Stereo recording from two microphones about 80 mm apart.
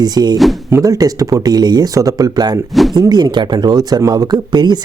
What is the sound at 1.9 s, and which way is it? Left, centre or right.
Speech, right.